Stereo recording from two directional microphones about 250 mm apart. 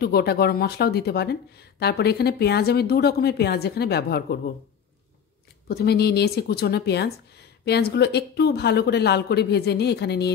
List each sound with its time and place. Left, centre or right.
0.0 s speech: left
5.7 s speech: left